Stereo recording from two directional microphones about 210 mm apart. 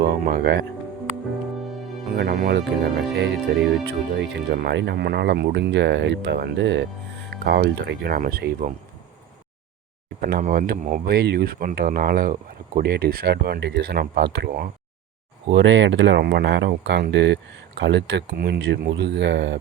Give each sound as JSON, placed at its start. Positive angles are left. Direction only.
{"t": 0.0, "sound": "speech", "side_deg": -45}
{"t": 2.1, "sound": "speech", "side_deg": -45}
{"t": 10.2, "sound": "speech", "side_deg": -45}
{"t": 15.4, "sound": "speech", "side_deg": -55}